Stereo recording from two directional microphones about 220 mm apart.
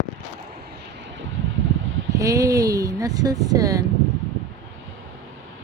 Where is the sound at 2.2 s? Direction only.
15° right (ahead or behind).